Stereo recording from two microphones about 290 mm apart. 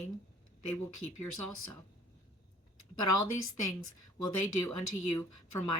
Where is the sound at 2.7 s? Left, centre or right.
Left.